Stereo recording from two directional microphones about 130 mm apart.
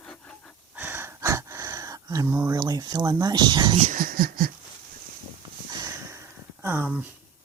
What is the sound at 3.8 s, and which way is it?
Speech, 80° right.